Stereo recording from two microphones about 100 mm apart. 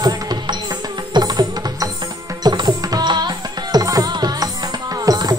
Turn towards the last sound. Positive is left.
turn(degrees=-40)  # may be behind; listen again after turning